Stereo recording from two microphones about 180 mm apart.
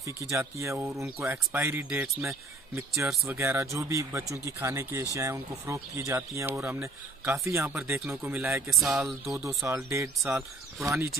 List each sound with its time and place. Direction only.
0.0 s speech: 15° right (ahead or behind)
8.6 s a sound: 5° right (ahead or behind)
9.8 s speech: 15° right (ahead or behind)